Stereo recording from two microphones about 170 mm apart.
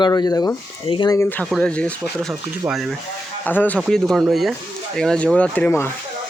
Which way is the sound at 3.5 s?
10° left (ahead or behind).